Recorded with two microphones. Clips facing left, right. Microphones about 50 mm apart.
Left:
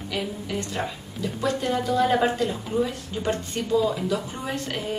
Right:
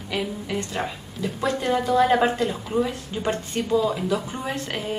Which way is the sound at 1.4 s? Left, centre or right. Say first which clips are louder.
Right 2 dB; right.